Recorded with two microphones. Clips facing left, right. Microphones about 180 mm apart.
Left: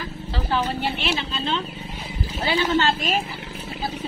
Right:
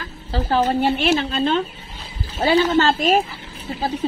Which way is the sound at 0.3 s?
40° right (ahead or behind).